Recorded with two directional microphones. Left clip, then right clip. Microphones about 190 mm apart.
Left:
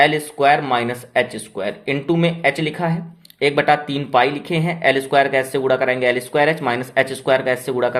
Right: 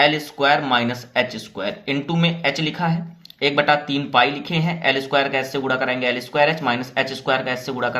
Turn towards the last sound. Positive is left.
turn(degrees=35)  # may be behind; listen again after turning